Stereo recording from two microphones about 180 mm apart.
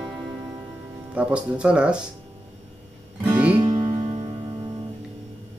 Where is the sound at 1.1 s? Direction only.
5° right (ahead or behind).